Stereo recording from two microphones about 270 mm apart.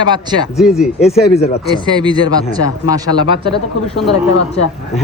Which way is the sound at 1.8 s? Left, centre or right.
Centre.